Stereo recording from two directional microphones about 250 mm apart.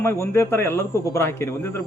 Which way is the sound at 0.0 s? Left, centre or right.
Centre.